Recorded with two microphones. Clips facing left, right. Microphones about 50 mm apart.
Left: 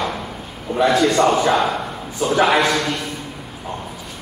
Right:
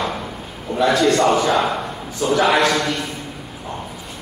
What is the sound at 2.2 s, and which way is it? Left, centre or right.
Speech, left.